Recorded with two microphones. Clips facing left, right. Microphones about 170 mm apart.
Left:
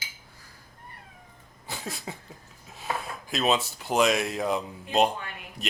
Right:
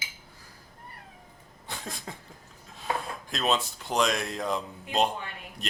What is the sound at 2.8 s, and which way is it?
Speech, 5° left (ahead or behind).